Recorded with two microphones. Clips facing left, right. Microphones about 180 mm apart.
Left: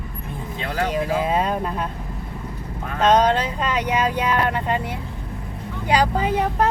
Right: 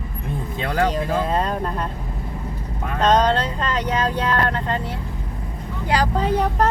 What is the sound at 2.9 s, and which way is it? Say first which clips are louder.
Speech: left 1 dB; 10° left (ahead or behind).